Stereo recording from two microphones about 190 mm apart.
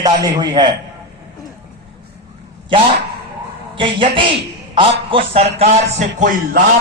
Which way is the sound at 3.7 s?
25° right (ahead or behind).